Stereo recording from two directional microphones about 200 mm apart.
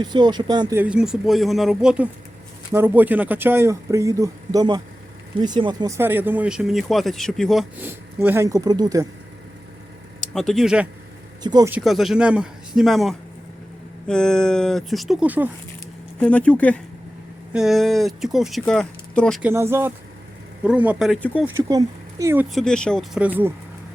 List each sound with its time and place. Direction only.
0.0 s speech: 20° right (ahead or behind)
0.8 s speech: 5° right (ahead or behind)
7.8 s speech: 10° right (ahead or behind)
10.2 s speech: centre (ahead or behind)
11.4 s speech: 20° right (ahead or behind)
11.7 s speech: centre (ahead or behind)
16.2 s speech: 5° left (ahead or behind)
19.4 s speech: 10° right (ahead or behind); by 21.4 s 5° left (ahead or behind)
21.4 s speech: 15° right (ahead or behind)
22.5 s speech: 5° left (ahead or behind)